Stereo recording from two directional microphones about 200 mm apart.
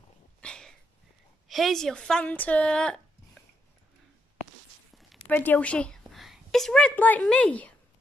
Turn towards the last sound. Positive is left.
turn(degrees=5)  # may be behind; listen again after turning